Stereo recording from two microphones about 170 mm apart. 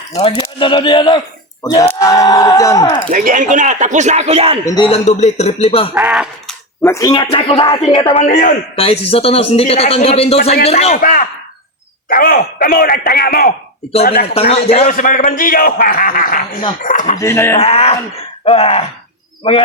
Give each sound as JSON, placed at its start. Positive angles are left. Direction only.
{"t": 0.6, "sound": "speech", "side_deg": 30}
{"t": 3.1, "sound": "a man's voice", "side_deg": -50}
{"t": 4.6, "sound": "speech", "side_deg": 25}
{"t": 4.9, "sound": "a man's voice", "side_deg": 40}
{"t": 5.9, "sound": "speech", "side_deg": -5}
{"t": 6.8, "sound": "a man's voice", "side_deg": 20}
{"t": 8.2, "sound": "speech", "side_deg": 50}
{"t": 8.7, "sound": "a man's voice", "side_deg": 35}
{"t": 14.3, "sound": "a man's voice", "side_deg": 35}
{"t": 14.8, "sound": "a man's voice", "side_deg": 50}
{"t": 17.2, "sound": "speech", "side_deg": 15}
{"t": 17.6, "sound": "a man's voice", "side_deg": 35}